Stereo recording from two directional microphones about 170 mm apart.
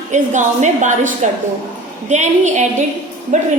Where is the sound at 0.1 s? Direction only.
45° right (ahead or behind).